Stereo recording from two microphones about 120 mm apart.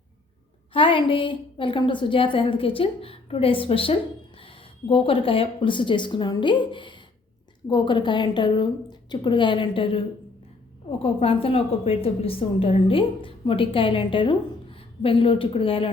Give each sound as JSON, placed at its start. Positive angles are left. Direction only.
{"t": 0.7, "sound": "a woman's voice", "side_deg": 45}
{"t": 11.0, "sound": "a woman's voice", "side_deg": 50}